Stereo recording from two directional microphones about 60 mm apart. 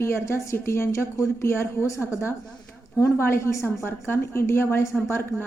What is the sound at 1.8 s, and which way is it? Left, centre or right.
A woman's voice, left.